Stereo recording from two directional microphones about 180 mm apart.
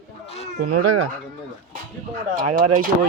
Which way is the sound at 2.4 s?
45° right (ahead or behind).